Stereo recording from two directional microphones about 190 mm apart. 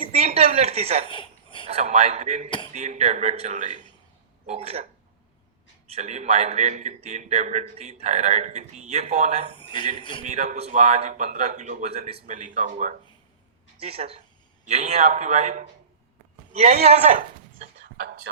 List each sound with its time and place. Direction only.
0.1 s a man's voice: 30° right (ahead or behind)
1.0 s a sound: 25° left (ahead or behind)
1.6 s a man's voice: 35° right (ahead or behind)
5.9 s a man's voice: 35° right (ahead or behind)
9.5 s a man's voice: 25° left (ahead or behind)
10.2 s a man's voice: 35° right (ahead or behind)
16.9 s a sound: 40° right (ahead or behind); by 18.3 s 55° right (ahead or behind)